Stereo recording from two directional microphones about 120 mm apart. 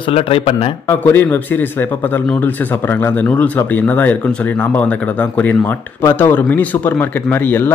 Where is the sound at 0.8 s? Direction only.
20° left (ahead or behind).